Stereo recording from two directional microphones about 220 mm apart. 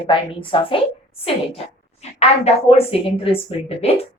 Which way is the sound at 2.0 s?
30° left (ahead or behind).